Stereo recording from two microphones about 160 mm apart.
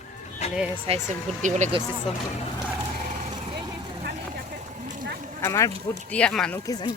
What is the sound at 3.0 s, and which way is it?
Vehicle, 50° right (ahead or behind).